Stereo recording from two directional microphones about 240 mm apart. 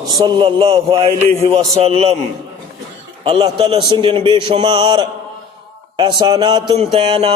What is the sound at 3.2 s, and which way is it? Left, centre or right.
A man's voice, right.